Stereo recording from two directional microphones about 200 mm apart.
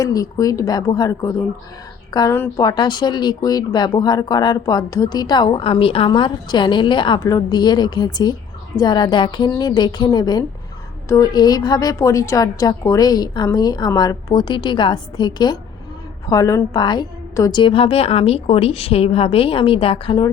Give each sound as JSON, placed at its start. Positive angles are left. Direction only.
{"t": 0.0, "sound": "speech", "side_deg": 15}